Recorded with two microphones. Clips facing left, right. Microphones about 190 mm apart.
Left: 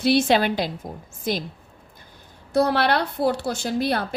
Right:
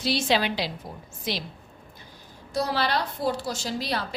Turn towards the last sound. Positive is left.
turn(degrees=55)  # may be behind; listen again after turning